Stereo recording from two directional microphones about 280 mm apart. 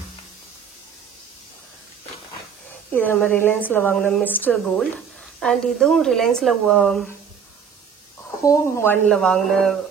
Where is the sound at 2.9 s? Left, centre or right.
Centre.